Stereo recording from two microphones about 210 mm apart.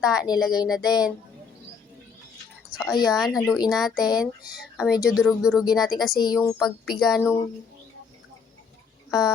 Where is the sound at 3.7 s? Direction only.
Centre (ahead or behind).